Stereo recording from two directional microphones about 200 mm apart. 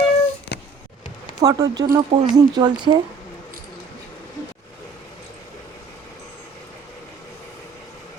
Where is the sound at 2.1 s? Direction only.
25° right (ahead or behind).